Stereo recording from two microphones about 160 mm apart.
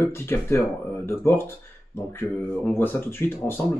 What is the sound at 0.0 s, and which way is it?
Speech, 15° left (ahead or behind).